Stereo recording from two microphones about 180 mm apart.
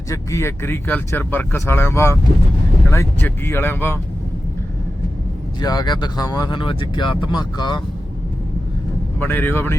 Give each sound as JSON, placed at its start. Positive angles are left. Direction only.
{"t": 0.1, "sound": "speech", "side_deg": 15}
{"t": 5.5, "sound": "speech", "side_deg": 20}
{"t": 9.1, "sound": "speech", "side_deg": 10}